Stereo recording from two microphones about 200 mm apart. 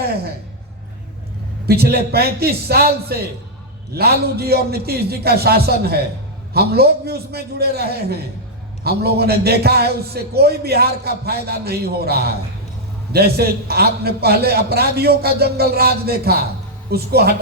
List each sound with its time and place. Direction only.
1.6 s a man's voice: 50° right (ahead or behind)